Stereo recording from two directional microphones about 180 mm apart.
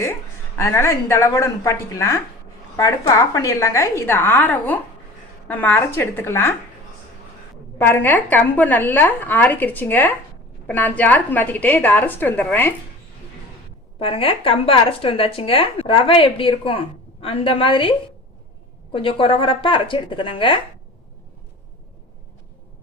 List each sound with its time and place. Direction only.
0.5 s a woman's voice: 15° left (ahead or behind)
7.8 s a woman's voice: 10° left (ahead or behind)
14.0 s speech: 30° left (ahead or behind)